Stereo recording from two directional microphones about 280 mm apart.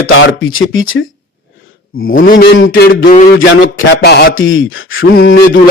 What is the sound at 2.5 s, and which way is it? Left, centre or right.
Speech, left.